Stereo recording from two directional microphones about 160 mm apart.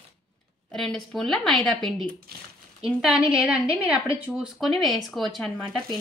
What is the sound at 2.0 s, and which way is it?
Speech, 75° right (ahead or behind).